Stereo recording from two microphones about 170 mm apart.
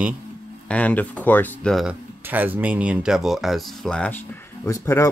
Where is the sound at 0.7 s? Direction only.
10° left (ahead or behind).